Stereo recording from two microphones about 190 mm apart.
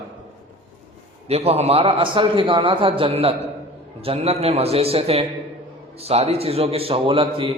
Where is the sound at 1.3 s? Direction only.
35° right (ahead or behind).